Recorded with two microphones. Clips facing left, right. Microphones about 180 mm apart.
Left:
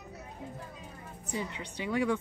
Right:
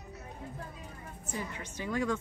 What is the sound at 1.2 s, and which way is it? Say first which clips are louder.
Speech: left 3 dB; 15° left (ahead or behind).